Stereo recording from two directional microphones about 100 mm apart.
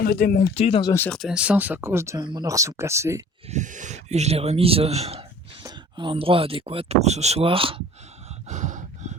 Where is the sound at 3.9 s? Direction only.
90° right; by 5.7 s 70° right (ahead or behind).